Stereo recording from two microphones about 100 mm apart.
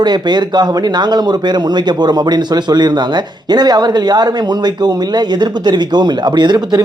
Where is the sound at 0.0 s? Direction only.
45° right (ahead or behind).